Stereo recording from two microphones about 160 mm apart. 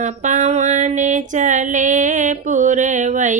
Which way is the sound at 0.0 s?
50° right (ahead or behind).